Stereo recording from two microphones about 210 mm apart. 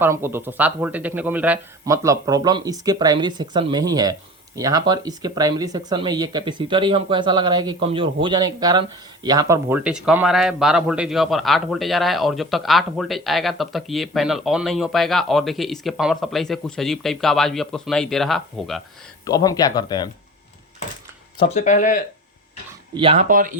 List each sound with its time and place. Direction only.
0.0 s speech: 10° right (ahead or behind)
19.2 s speech: 15° left (ahead or behind)
21.4 s speech: 35° left (ahead or behind)
23.0 s speech: 25° right (ahead or behind)
23.3 s speech: 40° right (ahead or behind)